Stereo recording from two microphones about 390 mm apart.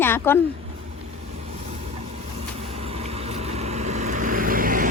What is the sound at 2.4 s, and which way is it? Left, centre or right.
Vehicle, centre.